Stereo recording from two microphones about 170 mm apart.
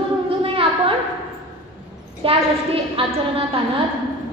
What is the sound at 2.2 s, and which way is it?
Speech, 30° right (ahead or behind).